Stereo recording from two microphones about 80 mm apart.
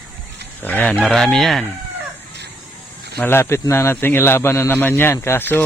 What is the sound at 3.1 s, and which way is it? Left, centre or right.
Speech, left.